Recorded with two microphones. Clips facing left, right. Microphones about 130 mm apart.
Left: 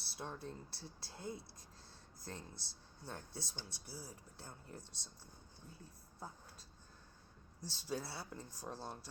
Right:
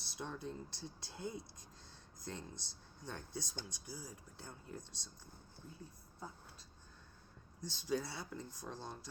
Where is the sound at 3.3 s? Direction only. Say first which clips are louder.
Right 4 dB; 30° left (ahead or behind).